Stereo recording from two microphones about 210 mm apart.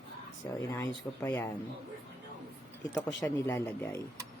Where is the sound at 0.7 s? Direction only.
15° left (ahead or behind).